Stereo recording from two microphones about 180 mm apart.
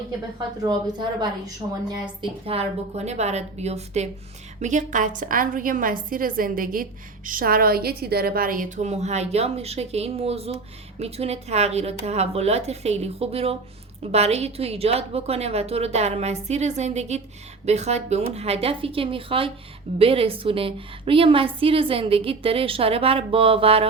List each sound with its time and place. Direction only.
0.3 s a woman's voice: 25° right (ahead or behind)